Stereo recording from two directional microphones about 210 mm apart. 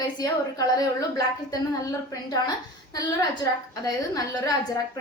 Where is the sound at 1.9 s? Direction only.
15° left (ahead or behind).